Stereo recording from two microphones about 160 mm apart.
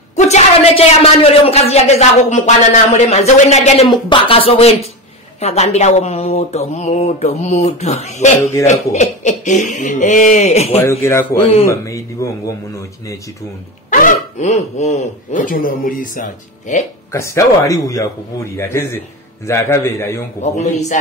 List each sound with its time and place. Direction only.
0.1 s a man's voice: 40° left (ahead or behind)
10.8 s a man's voice: 15° left (ahead or behind)
13.8 s speech: 55° left (ahead or behind)
17.1 s a man's voice: 20° left (ahead or behind)